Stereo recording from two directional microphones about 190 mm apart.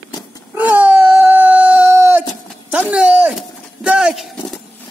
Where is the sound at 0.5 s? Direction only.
10° right (ahead or behind).